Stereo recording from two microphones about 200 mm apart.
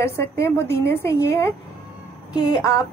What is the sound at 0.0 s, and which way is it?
A woman's voice, 10° left (ahead or behind).